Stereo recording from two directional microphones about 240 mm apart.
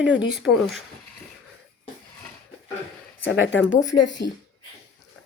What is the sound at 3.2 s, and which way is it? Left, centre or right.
Speech, left.